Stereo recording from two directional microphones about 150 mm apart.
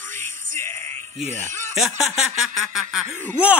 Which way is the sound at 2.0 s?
Centre (ahead or behind).